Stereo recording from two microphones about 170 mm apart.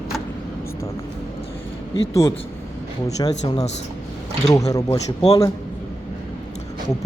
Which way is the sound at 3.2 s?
20° left (ahead or behind).